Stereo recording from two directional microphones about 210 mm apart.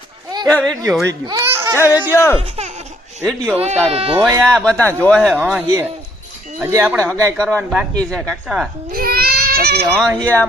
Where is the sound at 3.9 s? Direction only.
30° right (ahead or behind).